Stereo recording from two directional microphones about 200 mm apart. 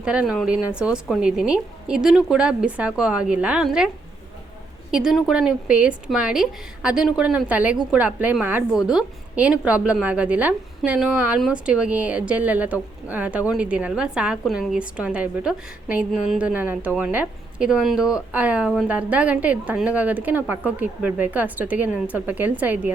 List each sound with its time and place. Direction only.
0.0 s a woman's voice: 5° right (ahead or behind)
4.9 s a woman's voice: 5° right (ahead or behind)